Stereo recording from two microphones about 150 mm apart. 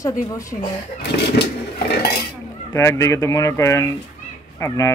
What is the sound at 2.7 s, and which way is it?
A woman's voice, 20° left (ahead or behind).